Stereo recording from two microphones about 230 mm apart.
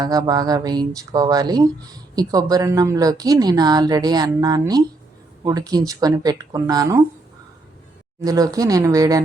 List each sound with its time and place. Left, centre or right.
0.0 s speech: centre
8.2 s speech: centre